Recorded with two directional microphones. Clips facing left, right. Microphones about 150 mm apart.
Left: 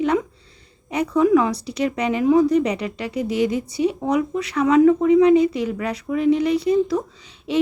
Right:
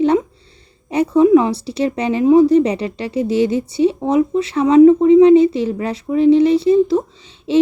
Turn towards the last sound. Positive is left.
turn(degrees=-25)  # may be behind; listen again after turning